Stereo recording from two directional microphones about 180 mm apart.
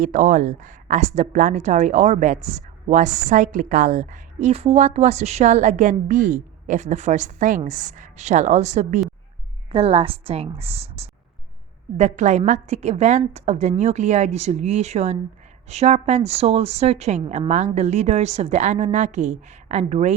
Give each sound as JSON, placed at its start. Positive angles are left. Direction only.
{"t": 0.0, "sound": "a woman's voice", "side_deg": -45}